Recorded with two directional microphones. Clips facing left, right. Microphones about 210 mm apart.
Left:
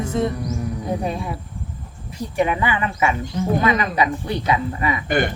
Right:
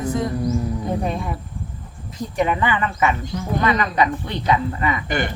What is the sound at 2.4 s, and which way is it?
Speech, 10° left (ahead or behind).